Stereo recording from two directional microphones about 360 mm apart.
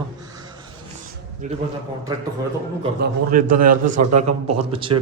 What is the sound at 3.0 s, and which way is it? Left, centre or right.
A man's voice, right.